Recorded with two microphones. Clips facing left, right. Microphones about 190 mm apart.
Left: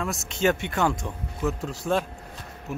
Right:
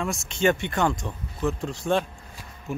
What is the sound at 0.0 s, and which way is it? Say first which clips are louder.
Speech: right 1 dB; centre (ahead or behind).